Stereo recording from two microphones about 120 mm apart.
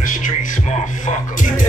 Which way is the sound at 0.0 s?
90° left.